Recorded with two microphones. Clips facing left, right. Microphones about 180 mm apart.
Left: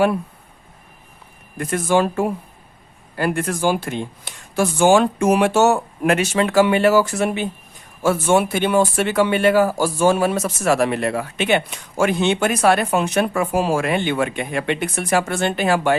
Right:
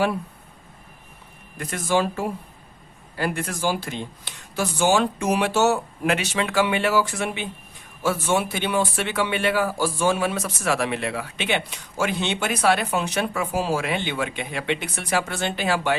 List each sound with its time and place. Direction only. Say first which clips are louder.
1.5 s speech: left 5 dB; 50° left (ahead or behind)